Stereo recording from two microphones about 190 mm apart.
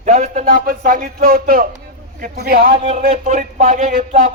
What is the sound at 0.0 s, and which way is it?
A man's voice, 40° right (ahead or behind).